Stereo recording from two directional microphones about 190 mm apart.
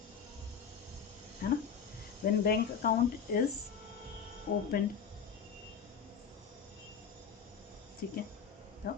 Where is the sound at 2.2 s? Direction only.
50° left (ahead or behind).